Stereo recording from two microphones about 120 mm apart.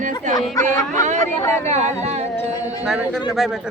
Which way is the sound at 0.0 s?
90° right.